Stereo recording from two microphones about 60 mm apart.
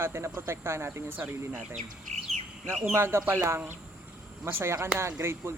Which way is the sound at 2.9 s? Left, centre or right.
Right.